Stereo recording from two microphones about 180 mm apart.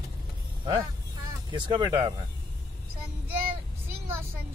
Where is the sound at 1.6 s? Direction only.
25° right (ahead or behind).